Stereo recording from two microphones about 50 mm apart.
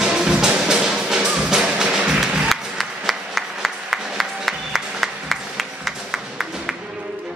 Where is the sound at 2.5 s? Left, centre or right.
Centre.